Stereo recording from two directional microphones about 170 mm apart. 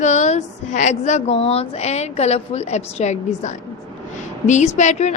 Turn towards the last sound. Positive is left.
turn(degrees=45)  # may be behind; listen again after turning